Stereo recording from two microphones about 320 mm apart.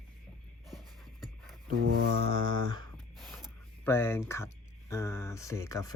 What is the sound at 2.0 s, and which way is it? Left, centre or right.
Speech, right.